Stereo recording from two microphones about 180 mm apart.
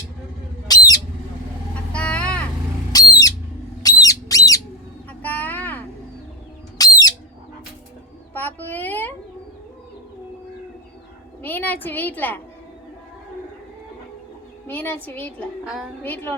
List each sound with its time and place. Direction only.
0.7 s bird: 20° left (ahead or behind)
1.9 s vehicle: 5° left (ahead or behind)
2.9 s owl: 20° left (ahead or behind)
3.8 s a sound: 20° left (ahead or behind)
5.2 s vehicle: 10° left (ahead or behind)
6.7 s bird: 20° left (ahead or behind)
8.3 s a child's voice: 10° left (ahead or behind)
11.4 s a woman's voice: 10° left (ahead or behind)
14.7 s a woman's voice: 10° left (ahead or behind)
15.6 s a woman's voice: centre (ahead or behind)
16.0 s a woman's voice: 10° left (ahead or behind)